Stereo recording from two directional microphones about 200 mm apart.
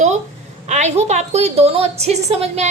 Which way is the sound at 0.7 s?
35° right (ahead or behind).